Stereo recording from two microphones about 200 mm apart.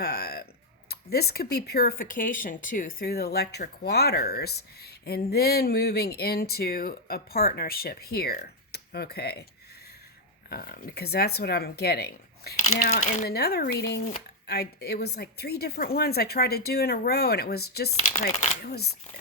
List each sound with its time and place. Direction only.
0.0 s a sound: 50° left (ahead or behind)
0.9 s speech: 50° left (ahead or behind)
10.5 s speech: 50° left (ahead or behind)
12.9 s speech: 35° left (ahead or behind); by 17.9 s 55° left (ahead or behind)
18.2 s a sound: 35° left (ahead or behind)
18.6 s speech: 55° left (ahead or behind)